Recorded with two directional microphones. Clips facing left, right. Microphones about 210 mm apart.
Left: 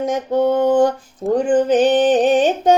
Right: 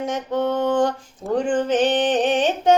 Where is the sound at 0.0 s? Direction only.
40° left (ahead or behind).